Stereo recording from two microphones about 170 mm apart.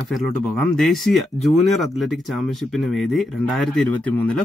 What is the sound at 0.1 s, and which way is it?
Speech, centre (ahead or behind).